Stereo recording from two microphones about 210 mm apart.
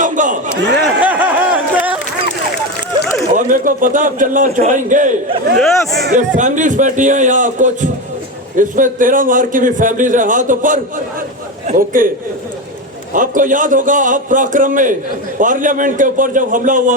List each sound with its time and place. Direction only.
0.0 s a sound: 35° right (ahead or behind)
1.0 s a sound: 5° right (ahead or behind)
3.3 s a man's voice: 40° right (ahead or behind)
5.5 s speech: centre (ahead or behind)
6.0 s a man's voice: 40° right (ahead or behind)
13.1 s a man's voice: 40° right (ahead or behind)